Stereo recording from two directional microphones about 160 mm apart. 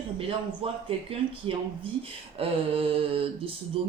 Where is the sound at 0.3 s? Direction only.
35° right (ahead or behind).